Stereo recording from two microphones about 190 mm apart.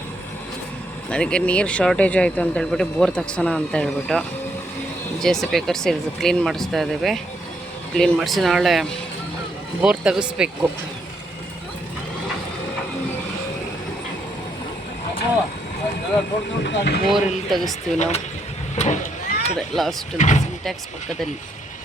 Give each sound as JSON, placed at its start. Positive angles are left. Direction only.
{"t": 1.1, "sound": "speech", "side_deg": 5}
{"t": 16.6, "sound": "speech", "side_deg": 60}
{"t": 17.1, "sound": "speech", "side_deg": 0}
{"t": 17.9, "sound": "speech", "side_deg": 35}
{"t": 18.8, "sound": "vehicle", "side_deg": 40}
{"t": 19.5, "sound": "speech", "side_deg": 0}
{"t": 20.1, "sound": "speech", "side_deg": 40}